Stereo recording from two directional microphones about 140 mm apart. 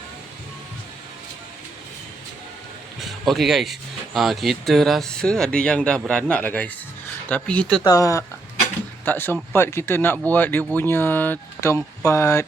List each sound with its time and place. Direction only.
3.0 s speech: centre (ahead or behind)
7.9 s speech: 25° left (ahead or behind)